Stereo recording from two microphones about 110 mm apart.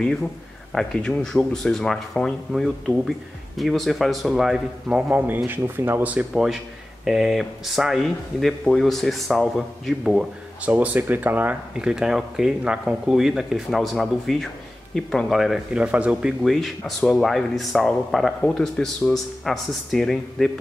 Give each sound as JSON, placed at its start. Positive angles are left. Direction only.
{"t": 0.7, "sound": "speech", "side_deg": 5}
{"t": 5.0, "sound": "speech", "side_deg": -20}